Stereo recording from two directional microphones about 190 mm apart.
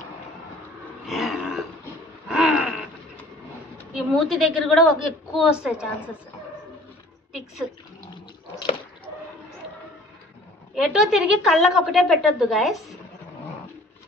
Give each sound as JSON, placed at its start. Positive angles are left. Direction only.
{"t": 1.0, "sound": "throat clearing", "side_deg": 0}
{"t": 2.2, "sound": "a sound", "side_deg": 0}
{"t": 3.9, "sound": "a woman's voice", "side_deg": 0}
{"t": 10.7, "sound": "a woman's voice", "side_deg": 0}